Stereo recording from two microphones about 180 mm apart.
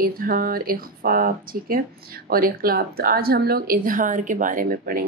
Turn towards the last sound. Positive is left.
turn(degrees=-55)  # may be behind; listen again after turning